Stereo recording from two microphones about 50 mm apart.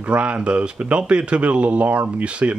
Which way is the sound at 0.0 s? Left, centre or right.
Right.